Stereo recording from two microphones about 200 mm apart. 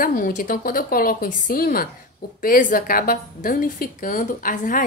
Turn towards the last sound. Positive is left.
turn(degrees=40)  # may be behind; listen again after turning